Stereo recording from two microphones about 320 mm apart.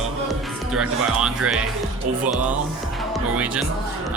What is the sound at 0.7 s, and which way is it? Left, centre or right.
Speech, centre.